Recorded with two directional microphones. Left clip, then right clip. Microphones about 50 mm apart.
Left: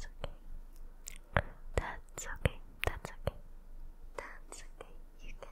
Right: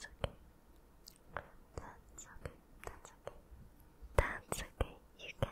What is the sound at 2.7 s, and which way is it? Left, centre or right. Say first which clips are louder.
Whispering: left 13 dB; left.